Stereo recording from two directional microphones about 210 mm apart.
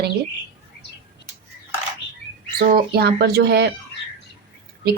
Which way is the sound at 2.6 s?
45° right (ahead or behind).